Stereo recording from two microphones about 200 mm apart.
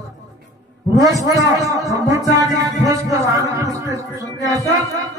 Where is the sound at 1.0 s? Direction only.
15° right (ahead or behind).